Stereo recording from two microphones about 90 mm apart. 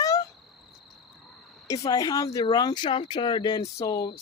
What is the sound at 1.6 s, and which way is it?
Speech, 40° left (ahead or behind).